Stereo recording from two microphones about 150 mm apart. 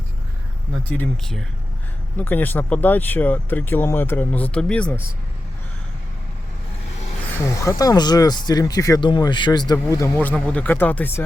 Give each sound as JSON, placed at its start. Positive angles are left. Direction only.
{"t": 0.9, "sound": "speech", "side_deg": 5}
{"t": 7.6, "sound": "speech", "side_deg": 20}
{"t": 10.2, "sound": "speech", "side_deg": 10}